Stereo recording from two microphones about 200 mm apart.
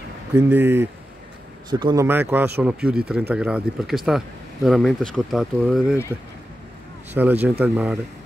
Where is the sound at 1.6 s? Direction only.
20° right (ahead or behind).